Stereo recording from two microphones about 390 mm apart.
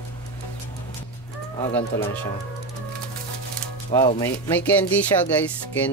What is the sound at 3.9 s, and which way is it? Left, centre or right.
Speech, centre.